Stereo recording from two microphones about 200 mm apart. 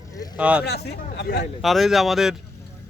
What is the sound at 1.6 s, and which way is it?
Speech, centre (ahead or behind).